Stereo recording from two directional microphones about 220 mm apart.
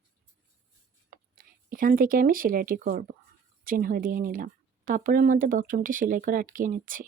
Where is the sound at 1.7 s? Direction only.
40° right (ahead or behind).